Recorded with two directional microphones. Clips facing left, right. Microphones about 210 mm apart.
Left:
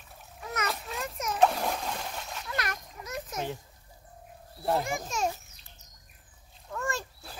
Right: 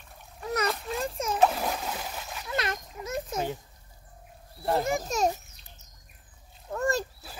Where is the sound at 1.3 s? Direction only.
5° right (ahead or behind).